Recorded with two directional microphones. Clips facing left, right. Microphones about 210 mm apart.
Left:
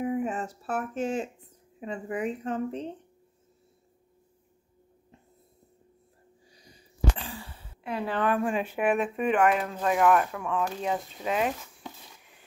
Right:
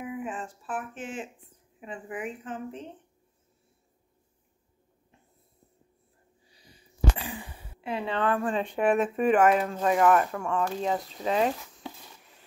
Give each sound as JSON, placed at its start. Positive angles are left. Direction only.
{"t": 0.0, "sound": "speech", "side_deg": 40}
{"t": 7.2, "sound": "a sound", "side_deg": -15}
{"t": 7.9, "sound": "speech", "side_deg": 0}
{"t": 8.2, "sound": "speech", "side_deg": 10}